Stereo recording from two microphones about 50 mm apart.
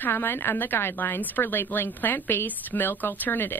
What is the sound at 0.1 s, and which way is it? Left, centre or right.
Speech, left.